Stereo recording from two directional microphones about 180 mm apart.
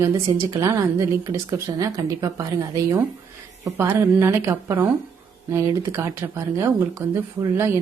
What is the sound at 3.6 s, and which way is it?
Speech, 15° right (ahead or behind).